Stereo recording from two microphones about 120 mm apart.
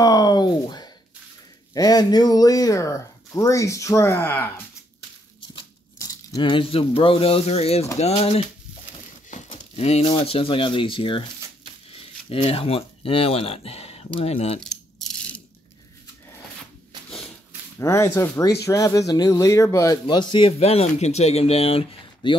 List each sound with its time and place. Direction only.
0.0 s a sound: 30° left (ahead or behind)
1.7 s speech: 35° left (ahead or behind); by 4.5 s 15° left (ahead or behind)
6.4 s speech: 45° left (ahead or behind)
9.5 s a sound: 60° left (ahead or behind)
10.0 s speech: 45° left (ahead or behind)
14.6 s rattle: 5° left (ahead or behind)
17.7 s speech: 25° left (ahead or behind)
20.1 s speech: 40° left (ahead or behind)